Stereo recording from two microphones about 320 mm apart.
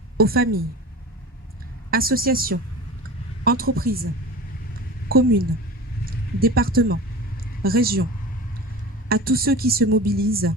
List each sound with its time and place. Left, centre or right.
0.2 s speech: right
1.9 s speech: right
5.1 s speech: right
6.4 s speech: right
9.0 s speech: right